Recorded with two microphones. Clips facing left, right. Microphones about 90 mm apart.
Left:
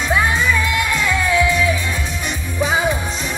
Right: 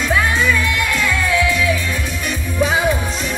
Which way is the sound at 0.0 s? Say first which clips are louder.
Right 1 dB; 15° left (ahead or behind).